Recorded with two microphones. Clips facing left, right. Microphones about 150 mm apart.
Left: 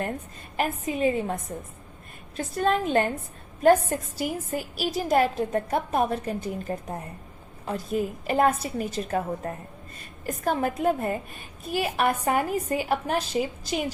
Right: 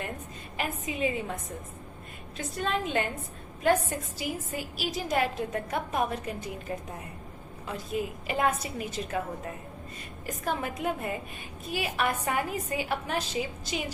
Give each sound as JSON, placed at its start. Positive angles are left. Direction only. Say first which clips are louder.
{"t": 0.5, "sound": "a woman's voice", "louder": "left 6 dB", "side_deg": 40}
{"t": 10.4, "sound": "a woman's voice", "louder": "left 7 dB", "side_deg": 40}